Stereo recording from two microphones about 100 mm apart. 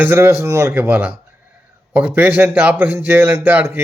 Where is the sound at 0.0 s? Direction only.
20° right (ahead or behind).